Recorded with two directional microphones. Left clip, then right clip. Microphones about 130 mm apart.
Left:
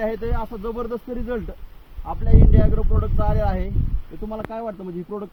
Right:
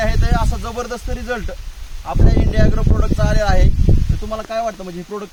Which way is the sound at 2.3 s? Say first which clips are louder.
Right 2 dB; 30° right (ahead or behind).